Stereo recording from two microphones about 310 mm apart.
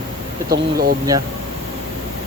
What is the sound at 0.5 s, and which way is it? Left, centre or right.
Speech, right.